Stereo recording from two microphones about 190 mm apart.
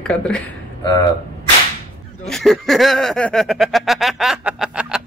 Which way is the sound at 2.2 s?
Centre (ahead or behind).